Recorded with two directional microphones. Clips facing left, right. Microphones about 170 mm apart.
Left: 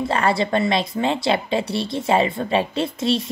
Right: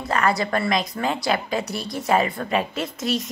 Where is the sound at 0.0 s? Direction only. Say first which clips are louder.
Left 2 dB; 30° left (ahead or behind).